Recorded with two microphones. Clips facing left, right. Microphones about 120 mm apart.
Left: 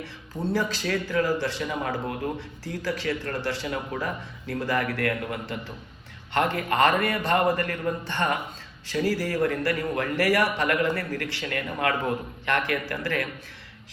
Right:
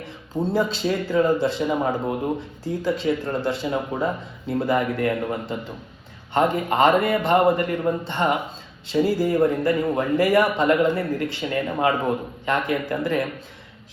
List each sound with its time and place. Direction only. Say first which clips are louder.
0.3 s speech: right 5 dB; 25° right (ahead or behind)